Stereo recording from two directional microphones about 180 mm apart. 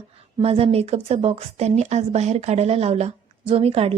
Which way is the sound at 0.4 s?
35° right (ahead or behind).